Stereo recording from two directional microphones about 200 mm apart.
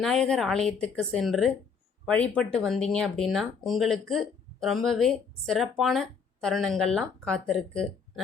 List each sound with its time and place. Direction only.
0.0 s speech: centre (ahead or behind)